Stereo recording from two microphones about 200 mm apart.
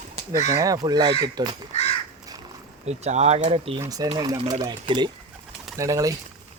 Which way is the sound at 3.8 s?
20° right (ahead or behind).